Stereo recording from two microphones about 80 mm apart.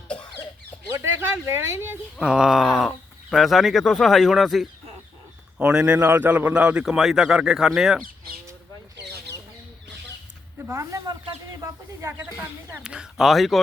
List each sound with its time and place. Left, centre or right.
0.9 s speech: right
2.1 s speech: centre
5.5 s speech: centre
6.1 s a man's voice: right
6.8 s speech: centre
10.7 s speech: right
12.8 s speech: centre